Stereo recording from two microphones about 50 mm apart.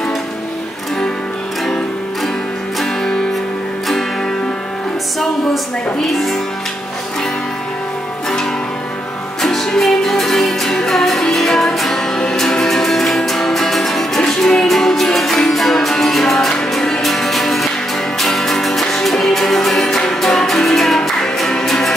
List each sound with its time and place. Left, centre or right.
2.8 s music: centre
6.0 s music: centre
9.7 s music: centre